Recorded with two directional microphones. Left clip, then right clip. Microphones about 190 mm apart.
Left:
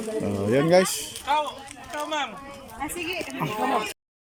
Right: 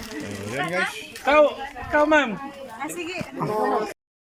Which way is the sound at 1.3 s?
55° right (ahead or behind).